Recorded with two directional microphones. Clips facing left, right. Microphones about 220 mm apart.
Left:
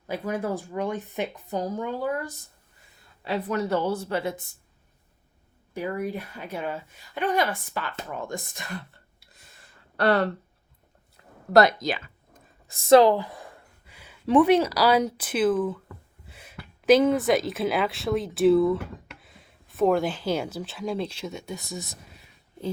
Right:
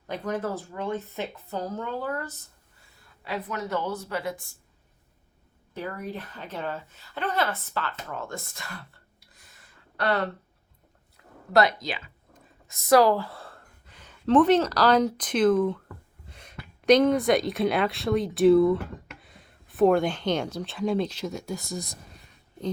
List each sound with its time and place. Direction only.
0.1 s a woman's voice: 10° left (ahead or behind)
3.2 s speech: 30° left (ahead or behind)
5.7 s a woman's voice: 10° left (ahead or behind)
11.5 s speech: 45° left (ahead or behind)
12.6 s a woman's voice: 30° left (ahead or behind); by 21.8 s centre (ahead or behind)